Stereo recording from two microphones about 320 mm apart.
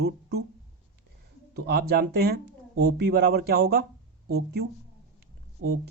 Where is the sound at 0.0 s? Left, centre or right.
Right.